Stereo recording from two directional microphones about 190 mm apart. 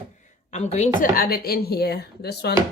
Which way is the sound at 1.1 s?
50° left (ahead or behind).